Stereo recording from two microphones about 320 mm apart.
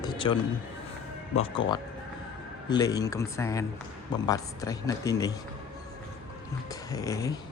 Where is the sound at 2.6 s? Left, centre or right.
Centre.